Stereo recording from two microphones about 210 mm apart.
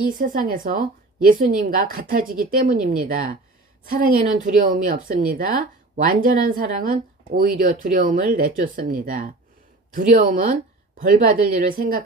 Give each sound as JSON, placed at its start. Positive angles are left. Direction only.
{"t": 0.0, "sound": "a woman's voice", "side_deg": -40}